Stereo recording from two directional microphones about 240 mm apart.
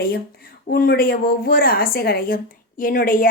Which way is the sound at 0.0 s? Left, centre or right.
Left.